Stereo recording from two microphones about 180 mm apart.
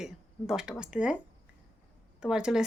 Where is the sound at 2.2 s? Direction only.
5° right (ahead or behind).